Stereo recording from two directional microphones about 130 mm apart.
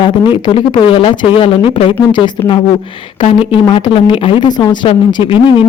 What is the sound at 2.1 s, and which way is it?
Speech, 35° left (ahead or behind).